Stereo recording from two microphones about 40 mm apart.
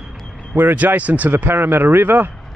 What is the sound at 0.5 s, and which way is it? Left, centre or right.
Speech, right.